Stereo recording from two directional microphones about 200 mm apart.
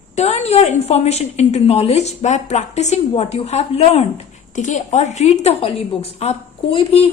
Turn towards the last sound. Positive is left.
turn(degrees=30)  # may be behind; listen again after turning